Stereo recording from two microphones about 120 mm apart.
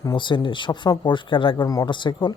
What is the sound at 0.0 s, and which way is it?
Speech, 35° left (ahead or behind).